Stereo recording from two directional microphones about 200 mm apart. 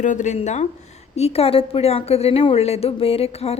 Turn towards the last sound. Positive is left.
turn(degrees=30)  # may be behind; listen again after turning